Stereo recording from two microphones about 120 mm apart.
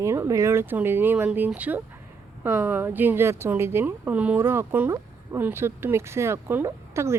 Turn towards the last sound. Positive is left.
turn(degrees=-25)  # may be behind; listen again after turning